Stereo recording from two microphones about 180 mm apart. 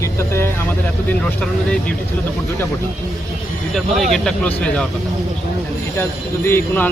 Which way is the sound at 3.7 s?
Centre (ahead or behind).